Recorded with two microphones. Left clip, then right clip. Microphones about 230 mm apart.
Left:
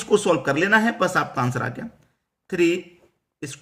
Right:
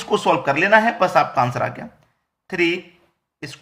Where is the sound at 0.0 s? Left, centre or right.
Left.